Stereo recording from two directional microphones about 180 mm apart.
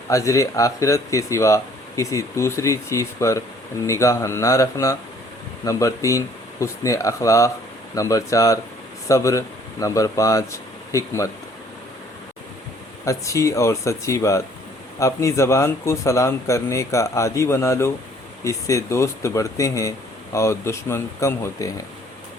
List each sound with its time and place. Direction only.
0.1 s speech: 15° left (ahead or behind)
13.1 s speech: 15° left (ahead or behind)